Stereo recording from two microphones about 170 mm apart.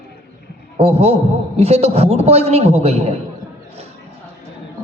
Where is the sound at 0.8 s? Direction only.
35° right (ahead or behind).